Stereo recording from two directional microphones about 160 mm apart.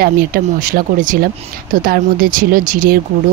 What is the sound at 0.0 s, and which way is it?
Speech, 65° right (ahead or behind).